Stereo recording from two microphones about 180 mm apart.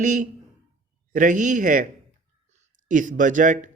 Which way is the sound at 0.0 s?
45° right (ahead or behind).